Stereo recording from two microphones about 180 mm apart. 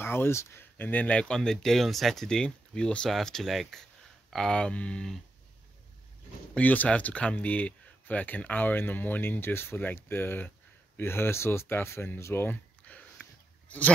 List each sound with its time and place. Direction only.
0.0 s speech: 10° left (ahead or behind)
6.5 s speech: 10° left (ahead or behind)